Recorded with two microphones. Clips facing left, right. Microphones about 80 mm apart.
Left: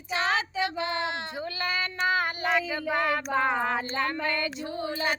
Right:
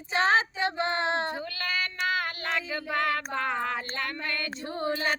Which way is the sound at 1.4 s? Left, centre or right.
Left.